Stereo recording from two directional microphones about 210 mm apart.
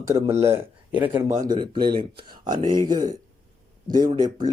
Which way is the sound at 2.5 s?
20° right (ahead or behind).